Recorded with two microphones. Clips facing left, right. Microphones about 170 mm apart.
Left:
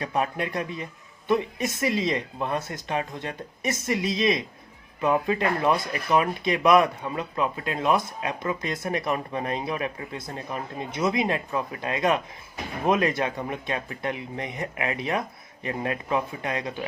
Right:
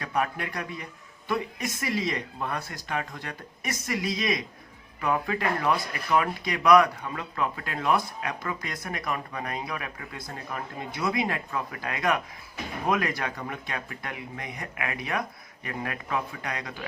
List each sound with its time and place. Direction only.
0.0 s speech: 20° left (ahead or behind)